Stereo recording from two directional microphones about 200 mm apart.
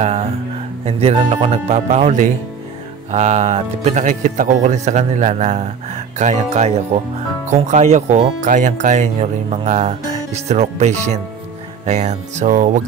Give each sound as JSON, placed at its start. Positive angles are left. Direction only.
{"t": 0.0, "sound": "speech", "side_deg": -30}